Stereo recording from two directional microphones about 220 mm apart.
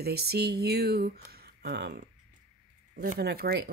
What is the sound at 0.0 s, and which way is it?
A woman's voice, 45° right (ahead or behind).